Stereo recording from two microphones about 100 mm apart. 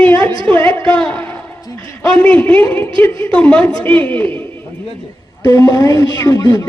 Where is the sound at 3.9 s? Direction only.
60° right (ahead or behind).